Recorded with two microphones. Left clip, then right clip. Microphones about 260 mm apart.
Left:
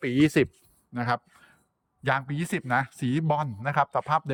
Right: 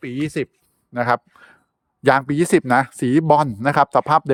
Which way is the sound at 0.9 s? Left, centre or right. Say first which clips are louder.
Right 9 dB; centre.